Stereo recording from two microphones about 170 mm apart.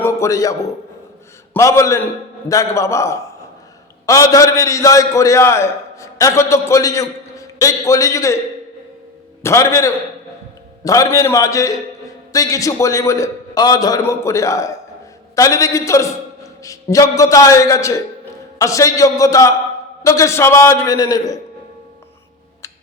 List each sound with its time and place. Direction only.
0.0 s a man's voice: 15° left (ahead or behind)
9.4 s a man's voice: 15° left (ahead or behind)